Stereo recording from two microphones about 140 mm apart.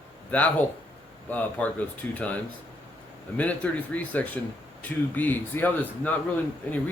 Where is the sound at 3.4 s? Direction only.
10° left (ahead or behind).